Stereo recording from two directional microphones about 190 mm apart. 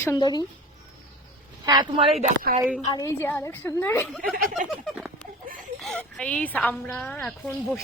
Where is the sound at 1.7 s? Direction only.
25° right (ahead or behind).